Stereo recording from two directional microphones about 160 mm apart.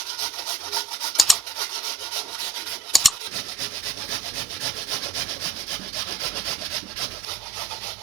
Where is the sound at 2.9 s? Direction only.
Centre (ahead or behind).